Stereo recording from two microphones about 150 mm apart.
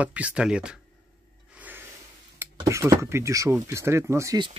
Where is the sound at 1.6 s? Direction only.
10° right (ahead or behind).